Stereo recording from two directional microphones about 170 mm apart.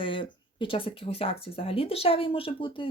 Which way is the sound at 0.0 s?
30° left (ahead or behind).